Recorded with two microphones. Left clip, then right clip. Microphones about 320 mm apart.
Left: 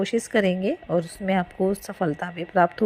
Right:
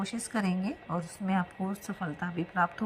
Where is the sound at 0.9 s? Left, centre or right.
Centre.